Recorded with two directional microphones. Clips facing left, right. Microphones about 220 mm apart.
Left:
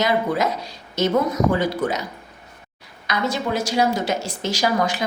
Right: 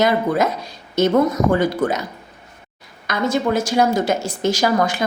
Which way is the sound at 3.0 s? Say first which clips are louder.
Right 4 dB; 50° right (ahead or behind).